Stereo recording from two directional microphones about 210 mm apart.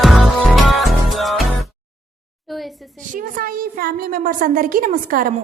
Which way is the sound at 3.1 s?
45° right (ahead or behind).